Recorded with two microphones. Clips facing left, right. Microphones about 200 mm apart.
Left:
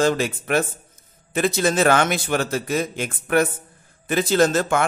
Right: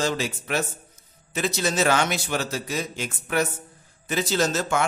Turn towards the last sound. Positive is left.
turn(degrees=55)  # may be behind; listen again after turning